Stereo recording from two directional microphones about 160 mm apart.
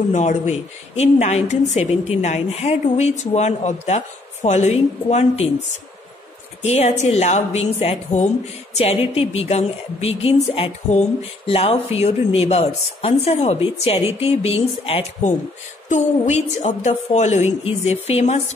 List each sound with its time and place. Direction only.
0.1 s a woman's voice: 50° left (ahead or behind)
6.6 s a woman's voice: 45° left (ahead or behind)